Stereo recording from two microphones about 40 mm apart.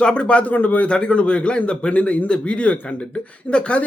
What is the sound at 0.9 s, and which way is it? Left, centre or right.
Speech, left.